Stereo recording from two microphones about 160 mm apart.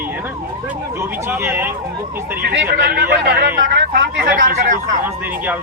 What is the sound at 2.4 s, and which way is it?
Speech, 80° right.